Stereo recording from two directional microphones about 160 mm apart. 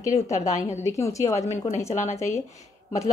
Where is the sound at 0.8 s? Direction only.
20° left (ahead or behind).